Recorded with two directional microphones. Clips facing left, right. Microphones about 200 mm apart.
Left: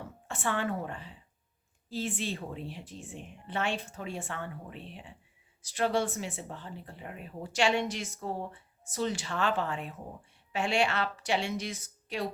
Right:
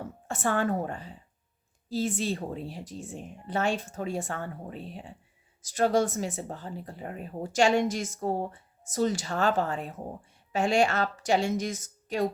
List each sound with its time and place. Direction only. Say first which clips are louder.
0.3 s a woman's voice: right 5 dB; 45° right (ahead or behind)